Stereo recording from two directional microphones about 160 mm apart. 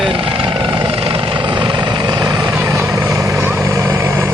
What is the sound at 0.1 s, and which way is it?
Helicopter, 35° right (ahead or behind).